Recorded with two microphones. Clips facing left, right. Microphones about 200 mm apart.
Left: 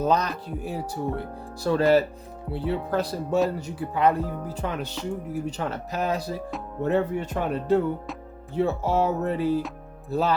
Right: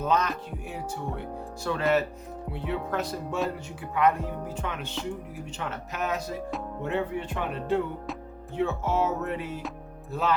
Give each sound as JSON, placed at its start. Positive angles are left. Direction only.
{"t": 0.0, "sound": "speech", "side_deg": 35}